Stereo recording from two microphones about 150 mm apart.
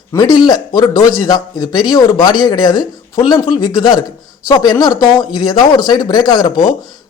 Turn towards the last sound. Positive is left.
turn(degrees=25)  # may be behind; listen again after turning